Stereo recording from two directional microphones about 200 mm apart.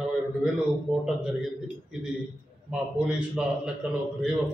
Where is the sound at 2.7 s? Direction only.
5° right (ahead or behind).